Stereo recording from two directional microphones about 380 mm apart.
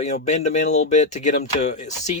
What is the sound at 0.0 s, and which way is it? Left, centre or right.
Speech, centre.